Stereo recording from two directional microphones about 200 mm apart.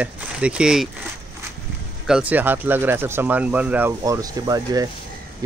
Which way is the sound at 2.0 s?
5° right (ahead or behind).